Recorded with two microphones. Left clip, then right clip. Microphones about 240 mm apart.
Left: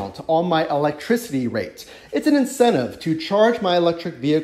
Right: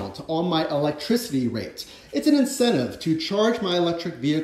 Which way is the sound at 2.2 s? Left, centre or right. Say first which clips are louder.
Left 3 dB; centre.